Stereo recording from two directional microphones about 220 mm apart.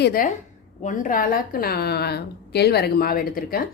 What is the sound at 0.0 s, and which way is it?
A woman's voice, 40° left (ahead or behind).